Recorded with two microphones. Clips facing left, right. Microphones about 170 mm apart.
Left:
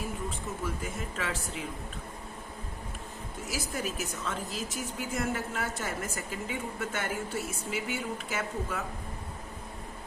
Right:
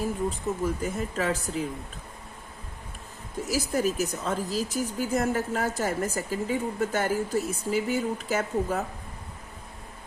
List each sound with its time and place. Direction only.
0.3 s speech: 40° right (ahead or behind)
3.4 s speech: 40° right (ahead or behind)